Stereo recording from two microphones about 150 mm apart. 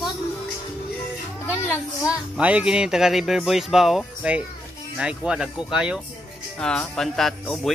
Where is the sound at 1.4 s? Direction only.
15° left (ahead or behind).